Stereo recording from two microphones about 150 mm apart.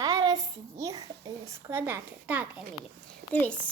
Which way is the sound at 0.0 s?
25° right (ahead or behind).